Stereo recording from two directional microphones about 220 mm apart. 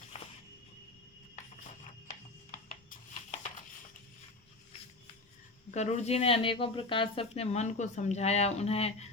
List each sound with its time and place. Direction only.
0.1 s music: 30° left (ahead or behind)
5.7 s speech: 30° left (ahead or behind)